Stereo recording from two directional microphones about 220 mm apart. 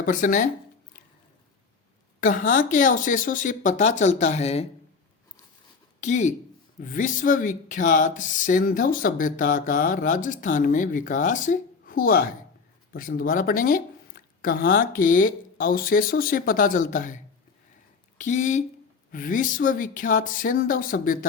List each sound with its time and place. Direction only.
0.0 s speech: 35° left (ahead or behind)
2.2 s speech: 35° left (ahead or behind)
6.0 s speech: 35° left (ahead or behind)
18.2 s speech: 35° left (ahead or behind)